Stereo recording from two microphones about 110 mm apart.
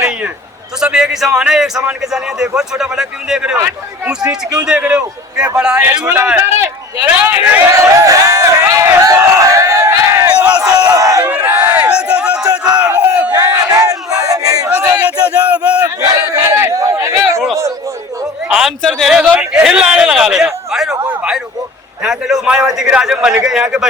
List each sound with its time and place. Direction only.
0.8 s a man's voice: 5° right (ahead or behind)
8.0 s a sound: 30° right (ahead or behind)
10.3 s crowd: 10° right (ahead or behind)
10.7 s crowd: 35° right (ahead or behind)
11.2 s crowd: 15° right (ahead or behind)
13.4 s battle cry: 35° right (ahead or behind)
15.2 s a sound: 10° right (ahead or behind)
16.0 s a sound: 25° right (ahead or behind)
18.4 s a man's voice: 5° right (ahead or behind)
18.8 s a man's voice: 5° left (ahead or behind)
19.2 s a man's voice: 10° right (ahead or behind)
22.0 s a man's voice: 5° right (ahead or behind)